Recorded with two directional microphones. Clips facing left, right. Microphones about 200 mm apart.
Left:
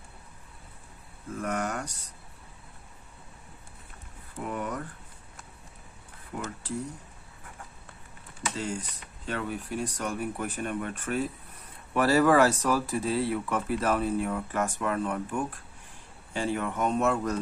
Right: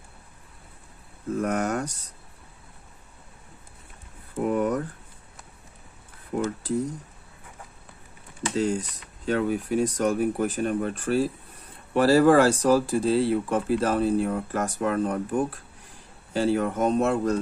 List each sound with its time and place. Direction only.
1.4 s speech: 40° right (ahead or behind)
4.4 s speech: 50° right (ahead or behind)
6.3 s speech: 40° right (ahead or behind)
8.5 s speech: 40° right (ahead or behind)